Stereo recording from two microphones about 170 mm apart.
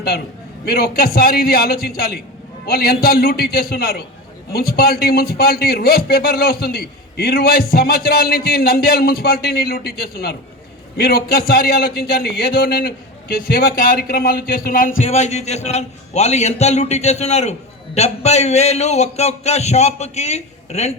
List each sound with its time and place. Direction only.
0.6 s a man's voice: 65° left (ahead or behind)
13.3 s a man's voice: 55° left (ahead or behind)
15.0 s a man's voice: 40° left (ahead or behind)